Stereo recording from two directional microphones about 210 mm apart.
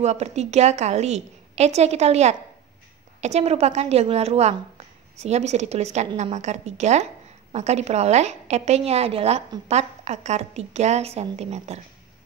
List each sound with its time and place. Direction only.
0.0 s a woman's voice: 30° right (ahead or behind)